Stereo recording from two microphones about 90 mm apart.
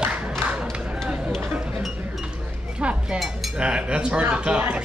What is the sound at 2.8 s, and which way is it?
Chink, 10° right (ahead or behind).